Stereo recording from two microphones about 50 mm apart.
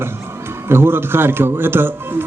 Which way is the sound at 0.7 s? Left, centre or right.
Right.